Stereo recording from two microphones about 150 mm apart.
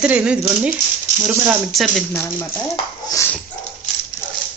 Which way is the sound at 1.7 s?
Centre (ahead or behind).